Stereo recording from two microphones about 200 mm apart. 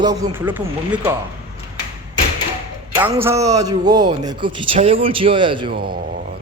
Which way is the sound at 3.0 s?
10° right (ahead or behind).